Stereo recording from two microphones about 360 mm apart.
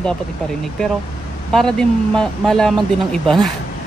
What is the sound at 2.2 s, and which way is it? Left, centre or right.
Speech, centre.